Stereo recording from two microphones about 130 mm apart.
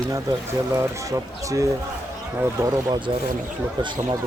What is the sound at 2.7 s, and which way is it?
Speech, 30° right (ahead or behind).